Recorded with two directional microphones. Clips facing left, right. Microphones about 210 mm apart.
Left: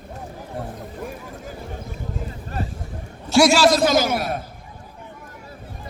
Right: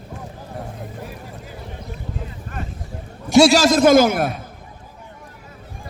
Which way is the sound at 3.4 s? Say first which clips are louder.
Right 3 dB; 45° right (ahead or behind).